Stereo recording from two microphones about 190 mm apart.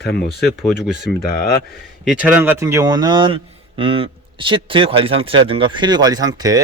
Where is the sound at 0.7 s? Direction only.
5° right (ahead or behind).